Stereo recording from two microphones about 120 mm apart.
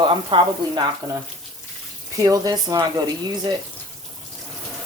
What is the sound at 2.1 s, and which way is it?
Speech, 30° right (ahead or behind).